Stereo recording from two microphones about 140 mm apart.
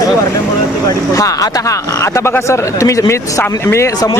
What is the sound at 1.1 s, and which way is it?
Speech, 25° left (ahead or behind).